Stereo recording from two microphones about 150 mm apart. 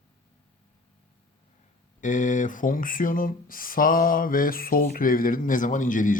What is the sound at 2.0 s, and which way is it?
Speech, 55° left (ahead or behind).